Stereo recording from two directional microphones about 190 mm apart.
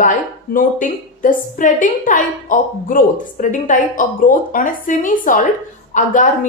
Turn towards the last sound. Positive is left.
turn(degrees=40)  # may be behind; listen again after turning